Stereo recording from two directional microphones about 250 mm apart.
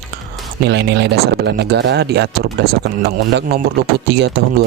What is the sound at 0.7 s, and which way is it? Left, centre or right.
Speech, right.